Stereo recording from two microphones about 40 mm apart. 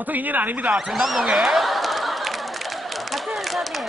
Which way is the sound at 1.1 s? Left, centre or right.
Centre.